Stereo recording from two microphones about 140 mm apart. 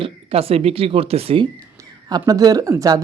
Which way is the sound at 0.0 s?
45° right (ahead or behind).